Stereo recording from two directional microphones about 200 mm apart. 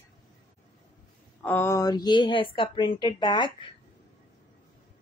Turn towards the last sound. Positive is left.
turn(degrees=20)  # may be behind; listen again after turning